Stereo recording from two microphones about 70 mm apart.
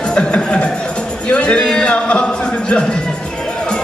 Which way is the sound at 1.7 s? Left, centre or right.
Centre.